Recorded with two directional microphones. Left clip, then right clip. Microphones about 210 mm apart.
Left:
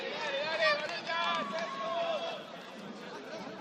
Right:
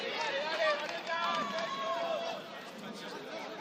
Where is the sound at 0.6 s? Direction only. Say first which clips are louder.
Left 4 dB; 15° left (ahead or behind).